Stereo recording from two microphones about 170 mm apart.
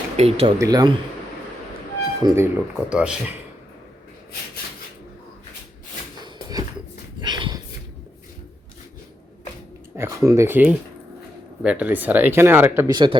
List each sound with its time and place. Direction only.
0.2 s speech: 35° right (ahead or behind)
0.6 s speech: 20° right (ahead or behind)
2.2 s speech: 15° right (ahead or behind)
6.2 s a sound: 25° right (ahead or behind)
7.2 s dog: 25° right (ahead or behind)
9.9 s speech: 15° right (ahead or behind)
12.9 s speech: 25° right (ahead or behind)